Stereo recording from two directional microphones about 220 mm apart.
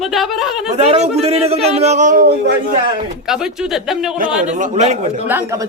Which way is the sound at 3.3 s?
Centre (ahead or behind).